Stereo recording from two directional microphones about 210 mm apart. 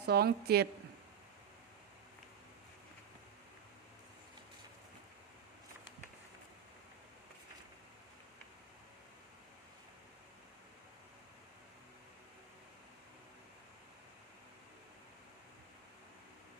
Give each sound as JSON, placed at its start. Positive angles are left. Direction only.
{"t": 0.0, "sound": "a woman's voice", "side_deg": -50}